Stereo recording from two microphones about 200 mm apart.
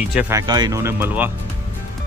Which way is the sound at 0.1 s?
10° right (ahead or behind).